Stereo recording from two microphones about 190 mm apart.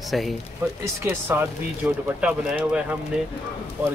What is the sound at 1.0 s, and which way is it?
A man's voice, 10° right (ahead or behind).